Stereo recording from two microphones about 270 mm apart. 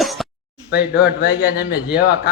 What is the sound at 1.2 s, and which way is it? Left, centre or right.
Speech, left.